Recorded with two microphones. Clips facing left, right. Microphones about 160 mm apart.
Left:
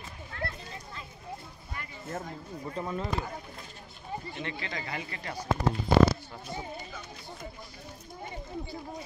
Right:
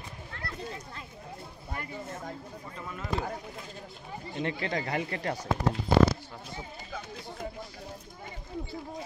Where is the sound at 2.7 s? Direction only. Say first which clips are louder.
Left 8 dB; 30° left (ahead or behind).